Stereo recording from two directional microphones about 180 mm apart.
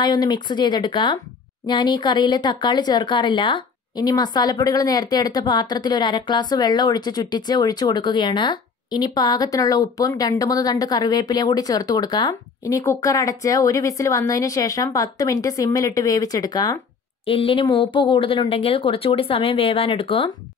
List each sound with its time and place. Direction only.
0.0 s speech: 25° left (ahead or behind)